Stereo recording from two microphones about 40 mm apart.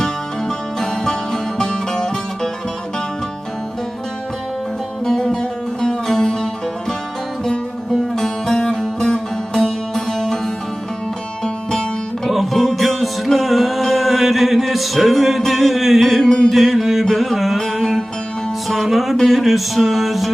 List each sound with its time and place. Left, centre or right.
0.0 s music: centre
5.3 s music: centre
12.5 s music: centre
16.2 s music: centre
16.5 s music: centre
17.6 s music: centre
19.1 s a sound: centre